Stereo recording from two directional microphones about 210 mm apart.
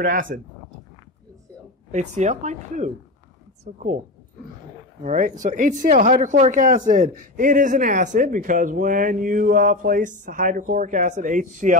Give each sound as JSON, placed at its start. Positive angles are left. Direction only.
{"t": 0.0, "sound": "speech", "side_deg": -40}
{"t": 1.9, "sound": "speech", "side_deg": -35}
{"t": 5.0, "sound": "speech", "side_deg": -35}